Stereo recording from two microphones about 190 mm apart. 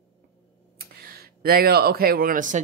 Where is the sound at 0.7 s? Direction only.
55° right (ahead or behind).